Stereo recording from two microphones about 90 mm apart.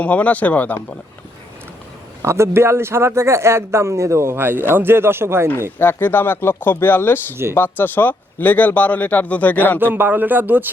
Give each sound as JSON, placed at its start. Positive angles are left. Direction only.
{"t": 0.0, "sound": "speech", "side_deg": 15}
{"t": 2.2, "sound": "speech", "side_deg": -30}
{"t": 5.8, "sound": "speech", "side_deg": 25}
{"t": 9.8, "sound": "speech", "side_deg": -20}